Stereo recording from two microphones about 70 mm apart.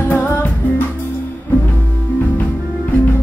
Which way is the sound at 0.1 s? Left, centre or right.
Left.